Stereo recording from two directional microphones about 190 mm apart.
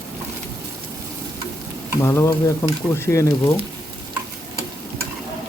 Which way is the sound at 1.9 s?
15° left (ahead or behind).